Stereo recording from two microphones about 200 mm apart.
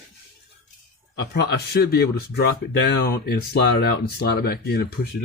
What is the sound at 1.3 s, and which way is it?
Speech, 55° left (ahead or behind).